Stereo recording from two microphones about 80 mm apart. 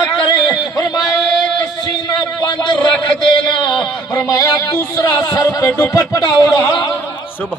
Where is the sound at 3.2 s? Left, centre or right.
Left.